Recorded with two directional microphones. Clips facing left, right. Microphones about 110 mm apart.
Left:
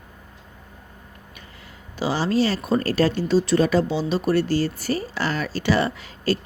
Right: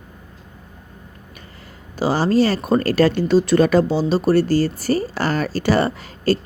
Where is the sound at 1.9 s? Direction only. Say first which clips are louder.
Right 5 dB; 45° right (ahead or behind).